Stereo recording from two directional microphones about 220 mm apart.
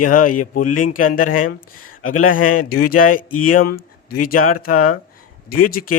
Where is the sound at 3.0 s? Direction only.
40° left (ahead or behind).